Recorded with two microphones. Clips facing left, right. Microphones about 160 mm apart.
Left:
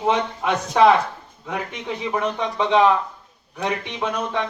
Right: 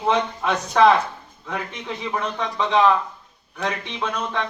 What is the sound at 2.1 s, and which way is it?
Speech, 15° left (ahead or behind).